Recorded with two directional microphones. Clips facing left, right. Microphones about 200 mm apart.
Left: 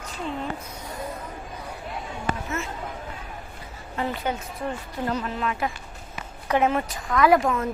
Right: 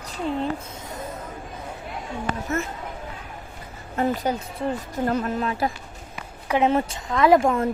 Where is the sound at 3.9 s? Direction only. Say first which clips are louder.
Right 4 dB; 40° right (ahead or behind).